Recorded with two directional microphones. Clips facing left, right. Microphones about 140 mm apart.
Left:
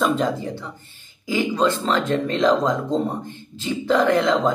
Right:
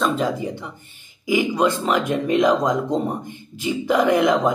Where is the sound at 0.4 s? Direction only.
15° right (ahead or behind).